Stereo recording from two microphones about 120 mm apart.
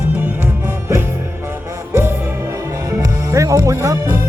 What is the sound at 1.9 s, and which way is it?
Music, 20° right (ahead or behind).